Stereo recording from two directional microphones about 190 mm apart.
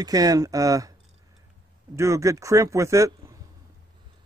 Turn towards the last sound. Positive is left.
turn(degrees=-15)  # may be behind; listen again after turning